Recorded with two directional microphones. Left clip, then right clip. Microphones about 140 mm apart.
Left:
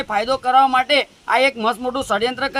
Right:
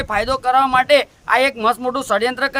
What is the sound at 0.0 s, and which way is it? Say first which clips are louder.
Speech: right 1 dB; 40° right (ahead or behind).